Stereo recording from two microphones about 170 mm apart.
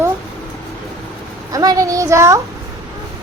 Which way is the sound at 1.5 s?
20° right (ahead or behind).